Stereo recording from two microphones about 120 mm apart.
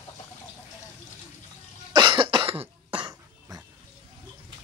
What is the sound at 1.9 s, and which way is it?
Cough, 40° right (ahead or behind).